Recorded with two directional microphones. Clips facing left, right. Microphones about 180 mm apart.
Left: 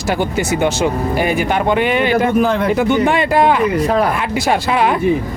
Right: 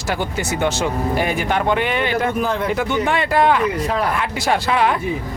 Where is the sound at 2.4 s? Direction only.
80° left.